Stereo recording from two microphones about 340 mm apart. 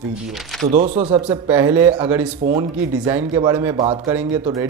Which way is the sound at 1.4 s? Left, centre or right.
Centre.